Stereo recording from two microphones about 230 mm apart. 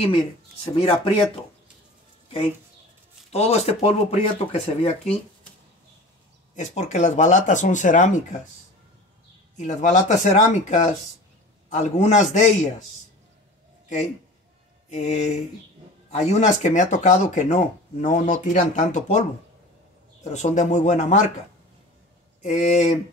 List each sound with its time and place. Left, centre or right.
0.7 s speech: left
2.2 s a sound: left
3.3 s speech: left
6.5 s speech: left
9.6 s speech: left
14.9 s speech: left
20.4 s speech: left
22.4 s speech: left